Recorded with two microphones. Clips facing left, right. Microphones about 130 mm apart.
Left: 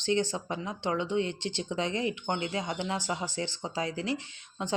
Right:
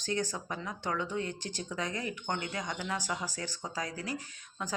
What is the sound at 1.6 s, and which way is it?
Speech, 25° left (ahead or behind).